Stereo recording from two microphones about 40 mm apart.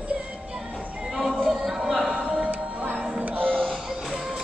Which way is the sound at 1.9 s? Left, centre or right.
Right.